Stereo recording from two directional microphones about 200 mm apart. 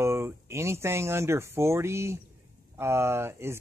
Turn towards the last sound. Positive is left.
turn(degrees=-10)  # may be behind; listen again after turning